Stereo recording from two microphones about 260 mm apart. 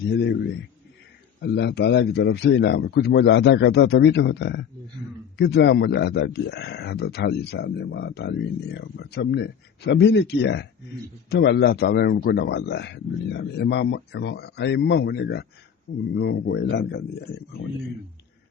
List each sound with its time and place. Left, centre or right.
0.1 s speech: left